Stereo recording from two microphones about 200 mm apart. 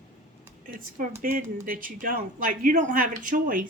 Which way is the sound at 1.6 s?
45° right (ahead or behind).